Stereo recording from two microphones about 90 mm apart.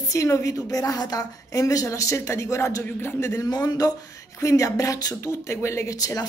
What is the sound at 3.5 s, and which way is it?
A woman's voice, 45° left (ahead or behind).